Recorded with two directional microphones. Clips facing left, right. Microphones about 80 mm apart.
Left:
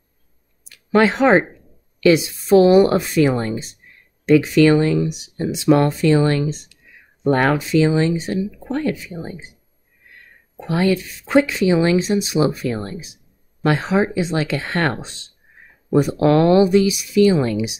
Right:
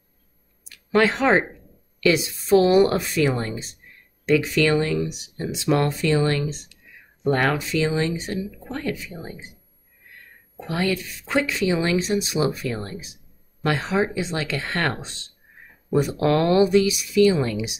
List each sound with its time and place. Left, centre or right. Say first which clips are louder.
0.9 s speech: left 4 dB; centre
10.7 s speech: left 6 dB; left